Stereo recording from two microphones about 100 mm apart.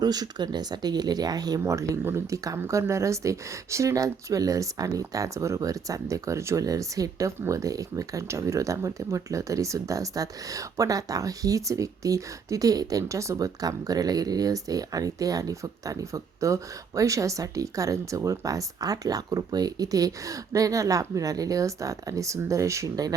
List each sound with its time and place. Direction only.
0.0 s speech: 40° right (ahead or behind)